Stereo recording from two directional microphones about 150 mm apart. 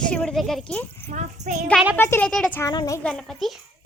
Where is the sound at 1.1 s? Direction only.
55° right (ahead or behind).